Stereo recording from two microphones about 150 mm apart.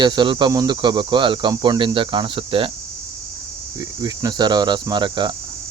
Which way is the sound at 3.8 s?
25° right (ahead or behind).